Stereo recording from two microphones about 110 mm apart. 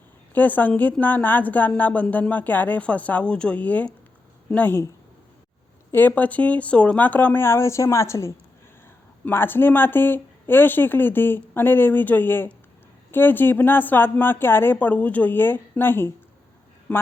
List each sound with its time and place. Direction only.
0.3 s a woman's voice: 15° left (ahead or behind)
5.9 s a woman's voice: 15° left (ahead or behind)